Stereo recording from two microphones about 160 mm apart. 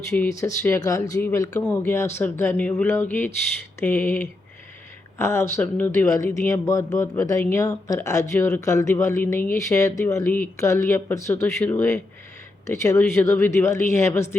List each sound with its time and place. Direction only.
0.3 s speech: 20° left (ahead or behind)